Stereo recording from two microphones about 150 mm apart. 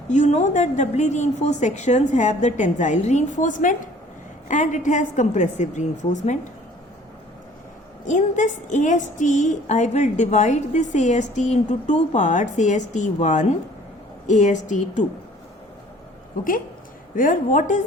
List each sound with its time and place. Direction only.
0.1 s a woman's voice: 50° left (ahead or behind)
8.0 s a woman's voice: 55° left (ahead or behind)
17.2 s a woman's voice: 60° left (ahead or behind)